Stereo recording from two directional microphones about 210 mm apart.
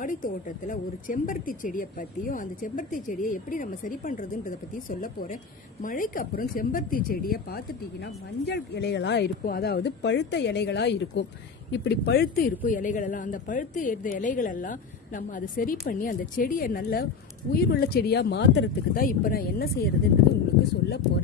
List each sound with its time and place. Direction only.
0.0 s speech: 40° left (ahead or behind)